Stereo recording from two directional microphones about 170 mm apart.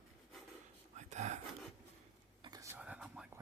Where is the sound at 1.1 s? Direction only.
45° right (ahead or behind).